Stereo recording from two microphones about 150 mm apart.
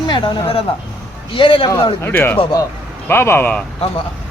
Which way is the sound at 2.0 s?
15° left (ahead or behind).